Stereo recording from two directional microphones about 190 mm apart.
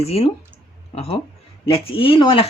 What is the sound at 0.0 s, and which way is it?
Speech, 30° left (ahead or behind).